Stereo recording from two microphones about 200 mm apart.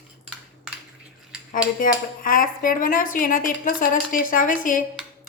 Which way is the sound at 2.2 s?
45° left (ahead or behind).